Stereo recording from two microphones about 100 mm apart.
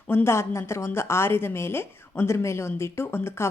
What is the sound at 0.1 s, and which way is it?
A woman's voice, 25° left (ahead or behind).